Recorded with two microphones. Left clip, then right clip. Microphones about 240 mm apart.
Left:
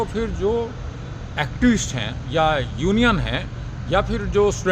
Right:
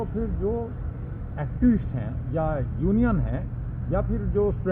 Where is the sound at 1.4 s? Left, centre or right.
Left.